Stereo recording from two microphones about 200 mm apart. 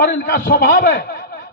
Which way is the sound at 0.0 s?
45° left (ahead or behind).